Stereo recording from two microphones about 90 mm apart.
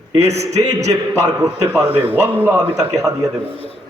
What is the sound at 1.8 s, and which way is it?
Speech, 20° right (ahead or behind).